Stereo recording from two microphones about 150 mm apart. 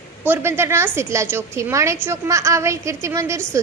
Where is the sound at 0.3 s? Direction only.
15° right (ahead or behind).